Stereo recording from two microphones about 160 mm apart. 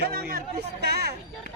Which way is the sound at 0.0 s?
70° right (ahead or behind).